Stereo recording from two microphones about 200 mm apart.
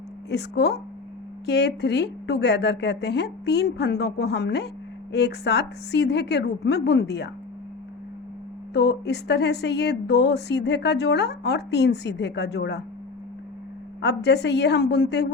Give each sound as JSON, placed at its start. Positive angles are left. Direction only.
{"t": 0.3, "sound": "speech", "side_deg": 55}
{"t": 8.7, "sound": "speech", "side_deg": 55}
{"t": 14.0, "sound": "speech", "side_deg": 60}